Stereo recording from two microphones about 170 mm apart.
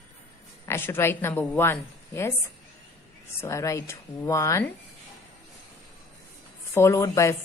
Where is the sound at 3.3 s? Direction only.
15° left (ahead or behind).